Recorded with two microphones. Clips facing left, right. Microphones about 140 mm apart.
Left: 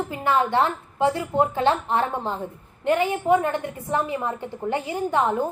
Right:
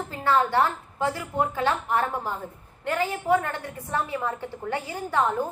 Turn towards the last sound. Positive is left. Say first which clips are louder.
# left 3 dB
turn(degrees=20)  # may be behind; listen again after turning